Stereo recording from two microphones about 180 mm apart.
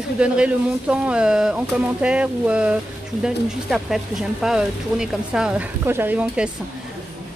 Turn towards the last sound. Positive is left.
turn(degrees=-10)  # may be behind; listen again after turning